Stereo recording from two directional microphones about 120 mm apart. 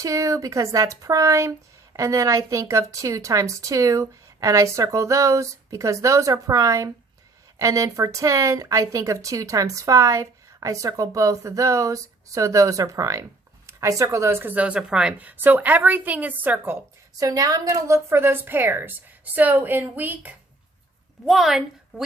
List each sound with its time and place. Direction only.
0.0 s a woman's voice: 25° right (ahead or behind)
17.2 s a woman's voice: 30° right (ahead or behind); by 20.3 s 15° right (ahead or behind)
21.2 s a woman's voice: centre (ahead or behind)